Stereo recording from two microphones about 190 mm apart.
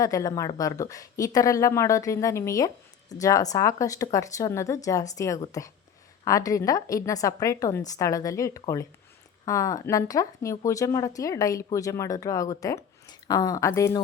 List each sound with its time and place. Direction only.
0.0 s speech: 15° left (ahead or behind)